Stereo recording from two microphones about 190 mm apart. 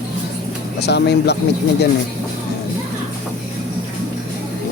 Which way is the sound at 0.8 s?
65° left (ahead or behind).